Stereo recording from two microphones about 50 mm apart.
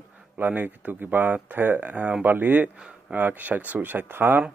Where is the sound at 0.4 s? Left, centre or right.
Right.